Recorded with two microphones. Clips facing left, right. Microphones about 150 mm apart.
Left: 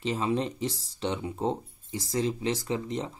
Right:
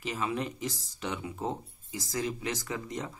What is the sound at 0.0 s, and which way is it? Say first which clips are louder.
Speech: left 5 dB; 30° left (ahead or behind).